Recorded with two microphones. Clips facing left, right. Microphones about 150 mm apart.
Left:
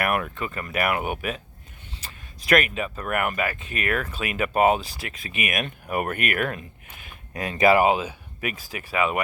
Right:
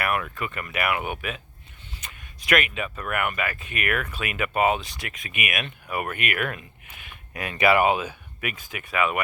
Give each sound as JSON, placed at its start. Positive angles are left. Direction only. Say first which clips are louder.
{"t": 0.0, "sound": "speech", "louder": "left 2 dB", "side_deg": 45}
{"t": 0.3, "sound": "speech", "louder": "left 1 dB", "side_deg": 30}